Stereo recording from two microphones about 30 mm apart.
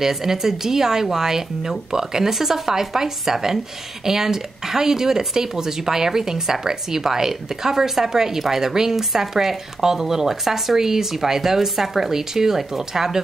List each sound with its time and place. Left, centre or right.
0.0 s speech: centre